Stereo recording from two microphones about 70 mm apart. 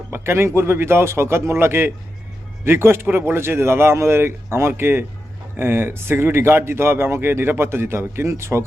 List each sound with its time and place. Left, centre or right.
0.1 s speech: right